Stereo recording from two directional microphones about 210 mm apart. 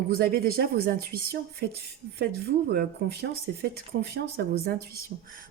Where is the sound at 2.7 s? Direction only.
50° right (ahead or behind).